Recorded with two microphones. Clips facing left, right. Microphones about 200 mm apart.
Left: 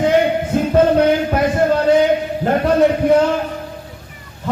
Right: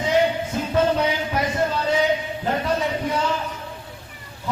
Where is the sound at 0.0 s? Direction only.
55° left (ahead or behind).